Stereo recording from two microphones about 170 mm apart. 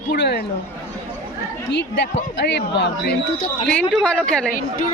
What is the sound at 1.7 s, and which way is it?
Speech, 85° left.